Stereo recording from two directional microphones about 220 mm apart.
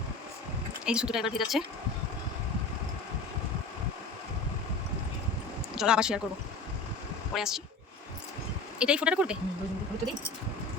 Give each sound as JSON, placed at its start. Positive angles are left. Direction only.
{"t": 0.9, "sound": "speech", "side_deg": -5}
{"t": 5.7, "sound": "speech", "side_deg": -5}
{"t": 7.3, "sound": "speech", "side_deg": 0}
{"t": 8.8, "sound": "speech", "side_deg": -5}